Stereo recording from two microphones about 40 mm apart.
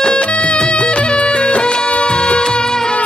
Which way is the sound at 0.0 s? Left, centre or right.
Left.